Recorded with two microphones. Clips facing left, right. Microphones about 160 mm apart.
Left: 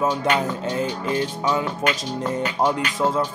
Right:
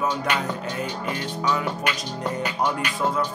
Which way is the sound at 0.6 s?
25° left (ahead or behind).